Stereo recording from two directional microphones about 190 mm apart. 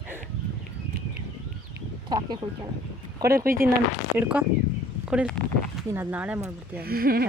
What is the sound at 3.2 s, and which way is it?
Speech, 50° right (ahead or behind).